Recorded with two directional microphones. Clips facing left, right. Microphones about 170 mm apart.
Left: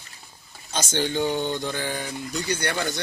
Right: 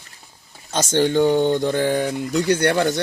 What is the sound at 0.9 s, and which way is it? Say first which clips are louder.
Speech: right 8 dB; 50° right (ahead or behind).